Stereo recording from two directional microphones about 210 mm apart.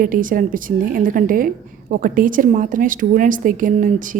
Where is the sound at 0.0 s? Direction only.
40° right (ahead or behind).